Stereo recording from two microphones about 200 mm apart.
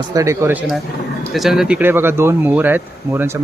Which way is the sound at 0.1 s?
15° right (ahead or behind).